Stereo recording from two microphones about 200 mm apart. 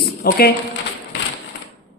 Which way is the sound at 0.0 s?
50° left (ahead or behind).